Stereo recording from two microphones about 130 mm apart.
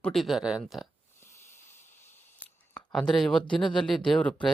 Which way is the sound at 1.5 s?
20° left (ahead or behind).